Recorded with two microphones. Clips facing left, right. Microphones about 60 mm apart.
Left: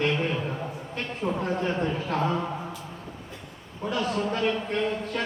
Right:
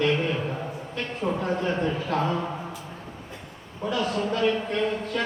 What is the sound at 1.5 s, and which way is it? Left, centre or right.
Speech, left.